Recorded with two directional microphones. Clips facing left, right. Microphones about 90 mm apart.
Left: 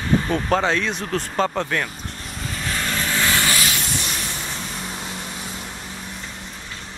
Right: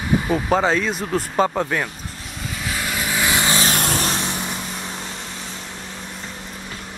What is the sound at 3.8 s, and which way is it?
Vehicle, 55° right (ahead or behind).